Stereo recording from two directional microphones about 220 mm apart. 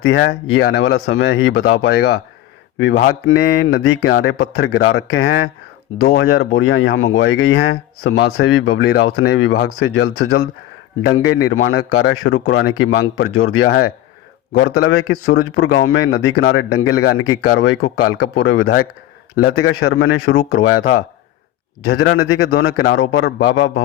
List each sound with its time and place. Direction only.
0.0 s speech: 70° left (ahead or behind)
0.3 s speech: 50° left (ahead or behind)
11.5 s speech: 65° left (ahead or behind)
11.8 s speech: 50° left (ahead or behind)